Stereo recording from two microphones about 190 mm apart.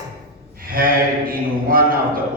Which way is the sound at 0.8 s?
50° right (ahead or behind).